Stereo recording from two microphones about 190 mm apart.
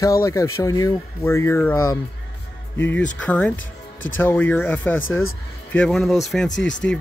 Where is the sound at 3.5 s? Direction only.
90° left.